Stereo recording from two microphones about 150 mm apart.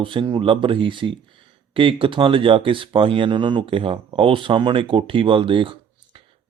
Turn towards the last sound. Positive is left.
turn(degrees=-35)  # may be behind; listen again after turning